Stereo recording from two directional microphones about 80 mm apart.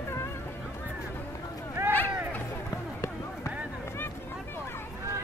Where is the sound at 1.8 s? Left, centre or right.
Right.